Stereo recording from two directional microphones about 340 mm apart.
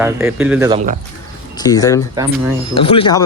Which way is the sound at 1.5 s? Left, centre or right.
Centre.